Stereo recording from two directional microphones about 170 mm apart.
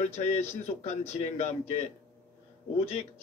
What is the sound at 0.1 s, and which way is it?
Speech, 40° left (ahead or behind).